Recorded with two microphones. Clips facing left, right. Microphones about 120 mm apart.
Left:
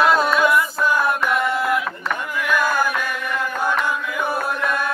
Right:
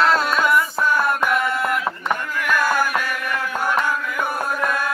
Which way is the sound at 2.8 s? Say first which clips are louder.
Even; 5° right (ahead or behind).